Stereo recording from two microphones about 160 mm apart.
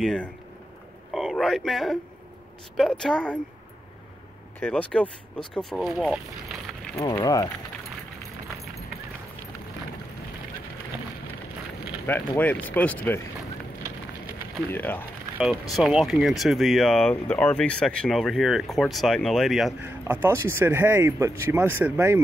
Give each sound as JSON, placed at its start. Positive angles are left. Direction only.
{"t": 0.0, "sound": "a man's voice", "side_deg": 0}
{"t": 4.6, "sound": "speech", "side_deg": 10}
{"t": 7.2, "sound": "speech", "side_deg": 20}
{"t": 12.1, "sound": "speech", "side_deg": 10}
{"t": 14.7, "sound": "speech", "side_deg": 10}
{"t": 15.7, "sound": "speech", "side_deg": 0}
{"t": 19.8, "sound": "speech", "side_deg": -15}